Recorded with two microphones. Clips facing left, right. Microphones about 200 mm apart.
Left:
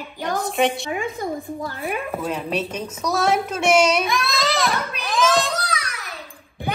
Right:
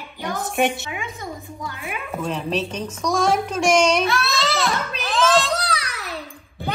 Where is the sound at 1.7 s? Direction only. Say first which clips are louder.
Left 3 dB; 35° left (ahead or behind).